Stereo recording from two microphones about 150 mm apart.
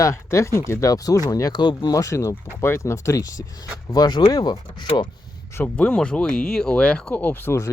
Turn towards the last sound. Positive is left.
turn(degrees=15)  # may be behind; listen again after turning